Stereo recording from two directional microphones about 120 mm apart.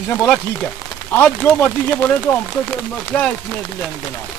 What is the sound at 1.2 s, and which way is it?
Speech, 15° left (ahead or behind).